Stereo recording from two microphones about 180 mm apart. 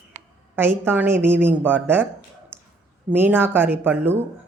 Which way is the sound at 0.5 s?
10° right (ahead or behind).